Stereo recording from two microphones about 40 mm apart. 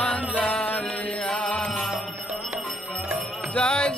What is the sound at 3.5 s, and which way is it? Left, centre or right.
Music, left.